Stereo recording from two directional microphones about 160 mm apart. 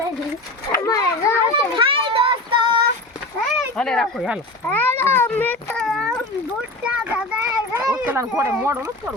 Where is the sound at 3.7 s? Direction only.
5° left (ahead or behind).